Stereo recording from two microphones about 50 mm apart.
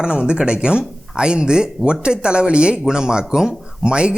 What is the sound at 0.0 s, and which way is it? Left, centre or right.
Speech, centre.